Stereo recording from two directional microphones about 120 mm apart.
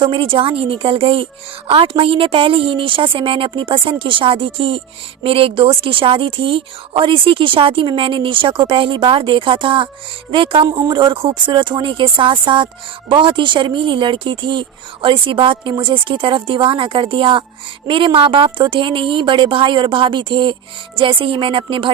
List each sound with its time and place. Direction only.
0.0 s speech: 45° right (ahead or behind)